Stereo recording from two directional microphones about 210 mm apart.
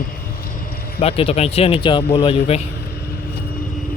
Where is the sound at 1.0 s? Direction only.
25° left (ahead or behind).